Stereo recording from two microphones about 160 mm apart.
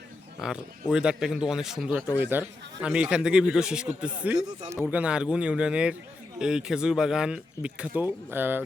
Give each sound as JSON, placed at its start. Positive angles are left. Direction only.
{"t": 0.4, "sound": "speech", "side_deg": -5}
{"t": 4.4, "sound": "speech", "side_deg": -25}
{"t": 4.9, "sound": "speech", "side_deg": -5}